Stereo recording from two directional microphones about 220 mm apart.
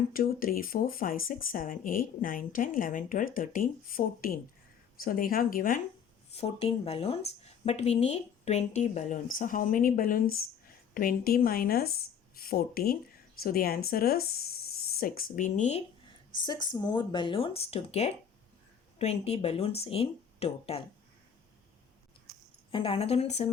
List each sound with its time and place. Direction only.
0.1 s speech: 40° left (ahead or behind)
6.3 s speech: 25° left (ahead or behind)
16.5 s speech: 20° left (ahead or behind)
22.7 s speech: 25° left (ahead or behind)